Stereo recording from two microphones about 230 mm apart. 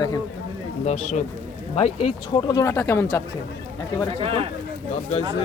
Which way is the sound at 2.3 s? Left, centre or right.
Centre.